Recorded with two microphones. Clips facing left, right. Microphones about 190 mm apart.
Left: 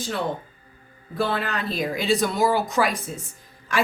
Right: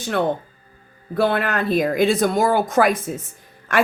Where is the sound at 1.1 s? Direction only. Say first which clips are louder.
Right 6 dB; 65° right (ahead or behind).